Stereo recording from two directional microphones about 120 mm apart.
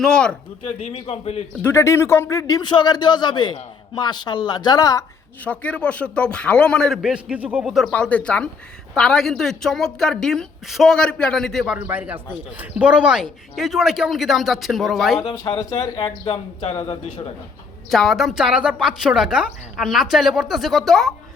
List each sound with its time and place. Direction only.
0.0 s a man's voice: 5° left (ahead or behind)
0.6 s a man's voice: 65° left (ahead or behind)
1.6 s speech: 25° left (ahead or behind)
5.5 s a man's voice: 10° left (ahead or behind)
7.0 s a woman's voice: 10° right (ahead or behind)
7.9 s a man's voice: 10° left (ahead or behind)
11.6 s a woman's voice: 10° right (ahead or behind)
15.5 s a man's voice: 35° left (ahead or behind)
17.9 s a woman's voice: centre (ahead or behind)